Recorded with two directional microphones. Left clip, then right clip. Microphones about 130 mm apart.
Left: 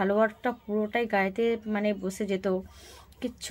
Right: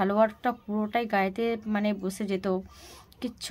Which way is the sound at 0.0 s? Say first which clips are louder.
Right 1 dB; 30° right (ahead or behind).